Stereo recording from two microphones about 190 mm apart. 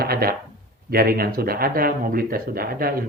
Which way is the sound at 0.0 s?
55° right (ahead or behind).